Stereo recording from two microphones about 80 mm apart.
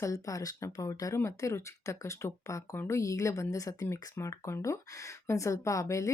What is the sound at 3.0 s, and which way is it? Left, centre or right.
Speech, left.